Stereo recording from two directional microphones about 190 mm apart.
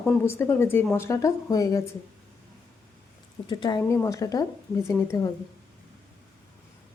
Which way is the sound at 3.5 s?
20° left (ahead or behind).